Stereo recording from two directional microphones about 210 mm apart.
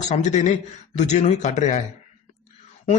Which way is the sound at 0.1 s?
35° left (ahead or behind).